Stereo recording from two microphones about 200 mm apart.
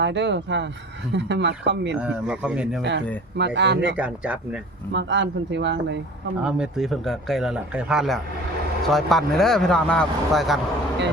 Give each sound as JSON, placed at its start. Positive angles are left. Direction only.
{"t": 0.0, "sound": "speech", "side_deg": -60}
{"t": 2.0, "sound": "a man's voice", "side_deg": -5}
{"t": 3.3, "sound": "speech", "side_deg": -60}
{"t": 3.8, "sound": "speech", "side_deg": -5}
{"t": 4.9, "sound": "speech", "side_deg": -60}
{"t": 6.4, "sound": "a man's voice", "side_deg": -5}